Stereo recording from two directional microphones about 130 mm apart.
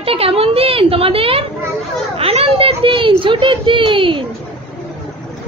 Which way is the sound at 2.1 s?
50° right (ahead or behind).